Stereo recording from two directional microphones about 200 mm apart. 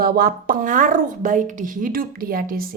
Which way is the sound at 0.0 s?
50° right (ahead or behind).